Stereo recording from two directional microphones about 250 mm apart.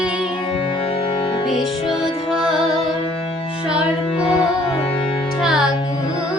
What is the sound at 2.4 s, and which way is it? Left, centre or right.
Music, centre.